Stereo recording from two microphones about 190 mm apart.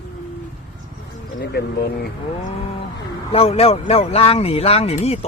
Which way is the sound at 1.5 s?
55° left (ahead or behind).